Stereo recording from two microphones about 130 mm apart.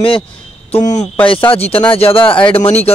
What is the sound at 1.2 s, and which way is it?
Speech, 45° left (ahead or behind).